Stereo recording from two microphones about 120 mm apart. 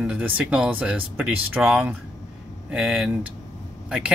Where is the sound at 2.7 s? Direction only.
5° right (ahead or behind).